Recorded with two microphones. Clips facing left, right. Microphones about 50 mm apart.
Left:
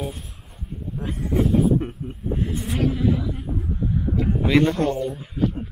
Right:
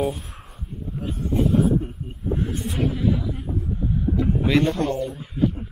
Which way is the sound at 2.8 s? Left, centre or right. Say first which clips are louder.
Left 1 dB; centre.